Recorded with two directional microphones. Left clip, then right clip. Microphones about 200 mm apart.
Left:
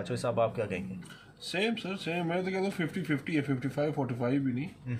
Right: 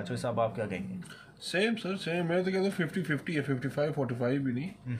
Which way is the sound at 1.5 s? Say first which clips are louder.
Right 2 dB; 15° right (ahead or behind).